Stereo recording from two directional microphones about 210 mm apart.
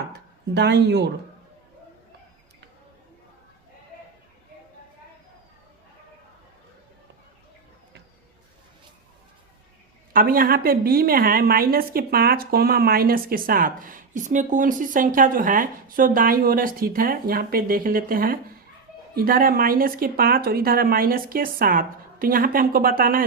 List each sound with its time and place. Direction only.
0.1 s speech: 55° right (ahead or behind)
10.1 s a woman's voice: 40° right (ahead or behind)